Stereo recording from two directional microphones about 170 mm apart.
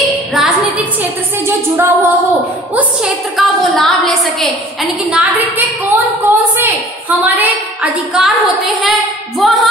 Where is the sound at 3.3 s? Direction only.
Centre (ahead or behind).